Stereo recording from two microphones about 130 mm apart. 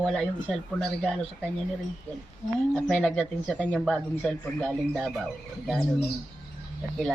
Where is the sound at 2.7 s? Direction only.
5° left (ahead or behind).